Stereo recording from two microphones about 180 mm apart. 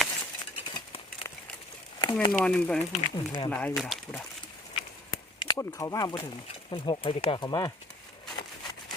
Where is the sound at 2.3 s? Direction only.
5° left (ahead or behind).